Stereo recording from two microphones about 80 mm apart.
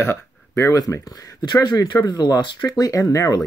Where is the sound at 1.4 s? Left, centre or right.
Left.